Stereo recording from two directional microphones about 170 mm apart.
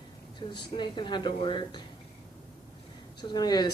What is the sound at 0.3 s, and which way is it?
Speech, 25° left (ahead or behind).